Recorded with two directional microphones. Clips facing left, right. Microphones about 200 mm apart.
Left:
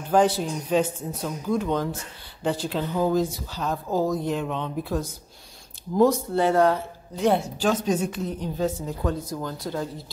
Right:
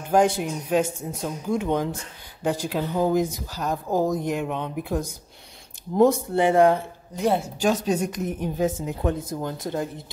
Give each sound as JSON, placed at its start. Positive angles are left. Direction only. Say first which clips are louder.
{"t": 0.1, "sound": "speech", "louder": "even", "side_deg": -10}